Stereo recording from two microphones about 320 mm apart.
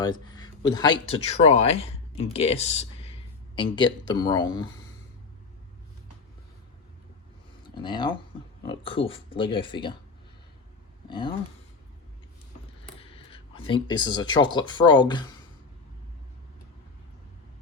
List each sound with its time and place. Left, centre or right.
0.0 s speech: centre
7.8 s speech: centre
11.1 s speech: centre
13.0 s speech: centre